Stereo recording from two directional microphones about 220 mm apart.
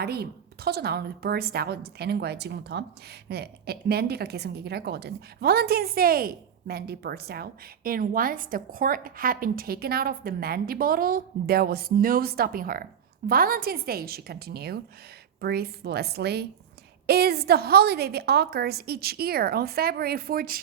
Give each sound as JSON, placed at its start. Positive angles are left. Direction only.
{"t": 0.0, "sound": "a woman's voice", "side_deg": -45}